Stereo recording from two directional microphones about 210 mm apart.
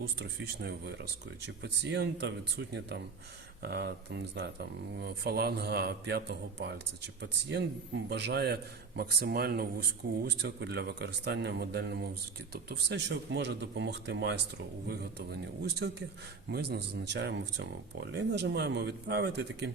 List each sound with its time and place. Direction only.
0.0 s a man's voice: 50° right (ahead or behind)